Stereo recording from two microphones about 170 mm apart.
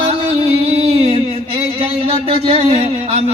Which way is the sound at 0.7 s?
35° right (ahead or behind).